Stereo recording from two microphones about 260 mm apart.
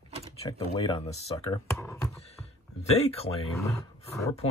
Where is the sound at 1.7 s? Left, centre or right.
Centre.